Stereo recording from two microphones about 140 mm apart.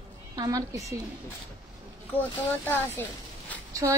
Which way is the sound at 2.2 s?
15° left (ahead or behind).